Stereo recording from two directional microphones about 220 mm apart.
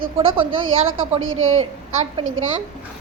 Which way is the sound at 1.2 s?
70° right (ahead or behind).